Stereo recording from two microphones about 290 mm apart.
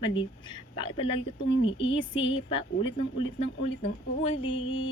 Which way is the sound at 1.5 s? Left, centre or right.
Left.